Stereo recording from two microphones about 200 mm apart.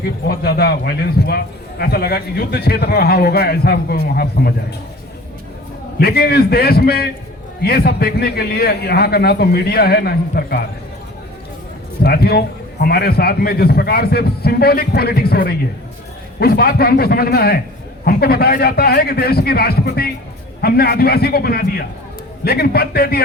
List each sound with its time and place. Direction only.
0.3 s a man's voice: 50° left (ahead or behind)
6.0 s a man's voice: 50° left (ahead or behind)
12.0 s a man's voice: 50° left (ahead or behind)